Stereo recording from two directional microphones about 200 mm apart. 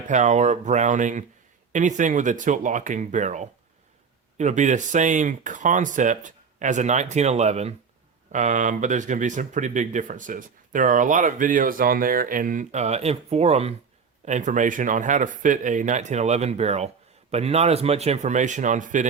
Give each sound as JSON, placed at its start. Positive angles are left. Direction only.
{"t": 0.1, "sound": "speech", "side_deg": -35}